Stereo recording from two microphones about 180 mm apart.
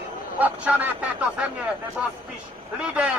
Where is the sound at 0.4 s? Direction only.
10° right (ahead or behind).